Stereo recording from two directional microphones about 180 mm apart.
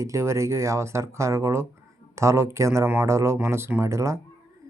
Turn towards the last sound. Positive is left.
turn(degrees=-15)  # may be behind; listen again after turning